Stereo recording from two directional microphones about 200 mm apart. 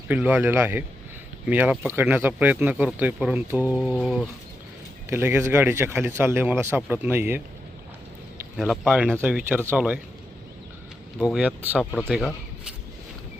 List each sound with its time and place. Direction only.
0.1 s speech: 10° right (ahead or behind)
5.0 s speech: 10° right (ahead or behind)
8.5 s speech: centre (ahead or behind)
11.2 s speech: 5° right (ahead or behind)
11.9 s speech: 5° left (ahead or behind)
12.1 s a sound: 5° right (ahead or behind)